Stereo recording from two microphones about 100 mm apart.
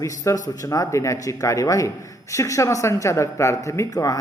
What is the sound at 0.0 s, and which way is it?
A woman's voice, 35° left (ahead or behind).